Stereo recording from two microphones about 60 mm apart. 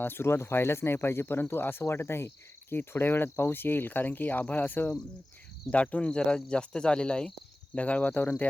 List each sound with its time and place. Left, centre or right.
0.0 s speech: left; by 7.3 s centre
7.8 s cricket: left